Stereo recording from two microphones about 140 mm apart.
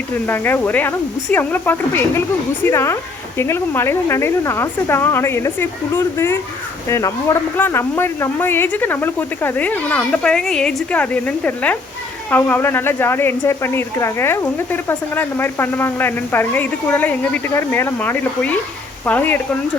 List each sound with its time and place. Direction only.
0.3 s speech: 15° left (ahead or behind)